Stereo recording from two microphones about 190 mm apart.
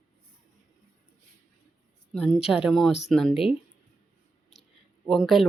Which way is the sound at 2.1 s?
5° left (ahead or behind).